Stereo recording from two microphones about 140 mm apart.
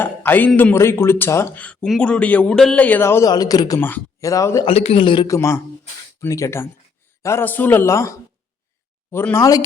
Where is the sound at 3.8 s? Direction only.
15° left (ahead or behind).